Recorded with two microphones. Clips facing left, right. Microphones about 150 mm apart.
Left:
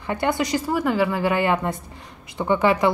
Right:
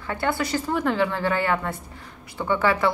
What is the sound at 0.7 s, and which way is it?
A woman's voice, 5° left (ahead or behind).